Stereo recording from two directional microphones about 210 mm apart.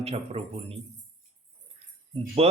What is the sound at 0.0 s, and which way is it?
Speech, 30° right (ahead or behind).